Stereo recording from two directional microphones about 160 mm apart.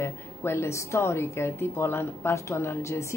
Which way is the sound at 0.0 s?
15° left (ahead or behind).